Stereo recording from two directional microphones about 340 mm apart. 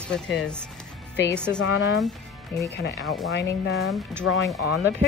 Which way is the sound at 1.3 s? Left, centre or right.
Centre.